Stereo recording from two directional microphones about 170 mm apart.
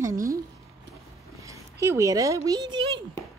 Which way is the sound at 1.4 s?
15° right (ahead or behind).